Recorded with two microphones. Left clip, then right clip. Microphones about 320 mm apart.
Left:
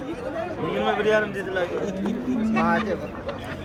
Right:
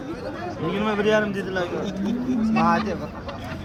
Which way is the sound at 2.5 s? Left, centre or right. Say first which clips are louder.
Right 2 dB; right.